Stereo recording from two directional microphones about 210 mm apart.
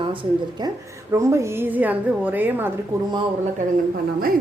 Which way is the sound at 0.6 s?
15° right (ahead or behind).